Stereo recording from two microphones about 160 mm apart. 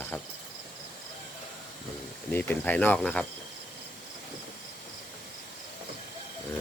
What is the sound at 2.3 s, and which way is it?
Speech, 10° left (ahead or behind).